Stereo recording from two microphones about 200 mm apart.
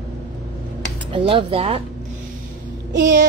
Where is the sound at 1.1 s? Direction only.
25° right (ahead or behind).